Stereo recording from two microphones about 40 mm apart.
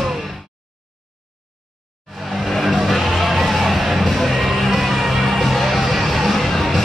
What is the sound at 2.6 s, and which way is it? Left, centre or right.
Music, centre.